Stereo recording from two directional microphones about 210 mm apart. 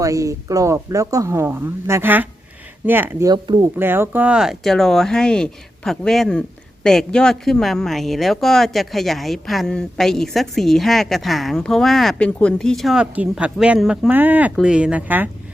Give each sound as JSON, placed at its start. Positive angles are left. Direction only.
{"t": 0.0, "sound": "speech", "side_deg": -15}
{"t": 3.8, "sound": "speech", "side_deg": -10}